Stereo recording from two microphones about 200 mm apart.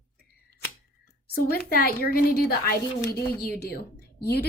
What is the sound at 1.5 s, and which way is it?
A woman's voice, 50° left (ahead or behind).